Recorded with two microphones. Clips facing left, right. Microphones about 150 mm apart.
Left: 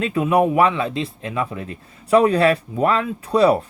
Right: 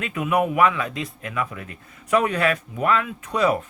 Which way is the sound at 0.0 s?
30° left (ahead or behind).